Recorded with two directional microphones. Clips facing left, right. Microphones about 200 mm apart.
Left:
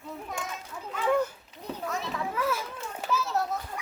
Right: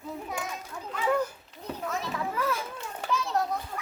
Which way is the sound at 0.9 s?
Centre (ahead or behind).